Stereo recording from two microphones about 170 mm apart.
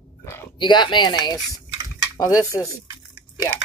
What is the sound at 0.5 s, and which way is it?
Speech, 25° left (ahead or behind).